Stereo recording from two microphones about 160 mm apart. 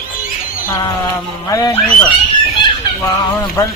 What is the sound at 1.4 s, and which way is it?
Speech, 20° left (ahead or behind).